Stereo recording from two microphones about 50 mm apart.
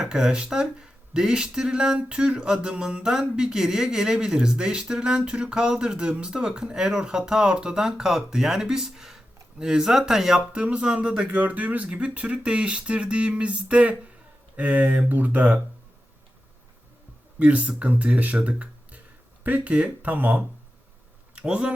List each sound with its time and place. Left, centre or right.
0.0 s speech: centre
10.5 s speech: right
11.3 s speech: right
17.4 s speech: right
21.3 s speech: right